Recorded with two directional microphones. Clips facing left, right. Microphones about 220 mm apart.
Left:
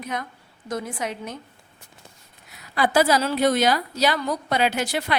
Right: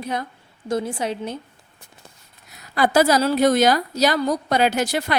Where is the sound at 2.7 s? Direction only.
45° right (ahead or behind).